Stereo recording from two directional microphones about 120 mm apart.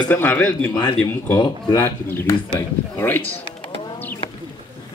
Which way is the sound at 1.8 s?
20° left (ahead or behind).